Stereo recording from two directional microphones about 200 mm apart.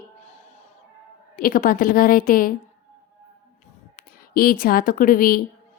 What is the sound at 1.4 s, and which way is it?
A woman's voice, 45° left (ahead or behind).